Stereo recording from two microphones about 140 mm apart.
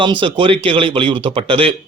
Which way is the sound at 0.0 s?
35° right (ahead or behind).